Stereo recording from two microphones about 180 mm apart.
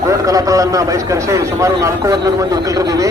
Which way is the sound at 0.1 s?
20° right (ahead or behind).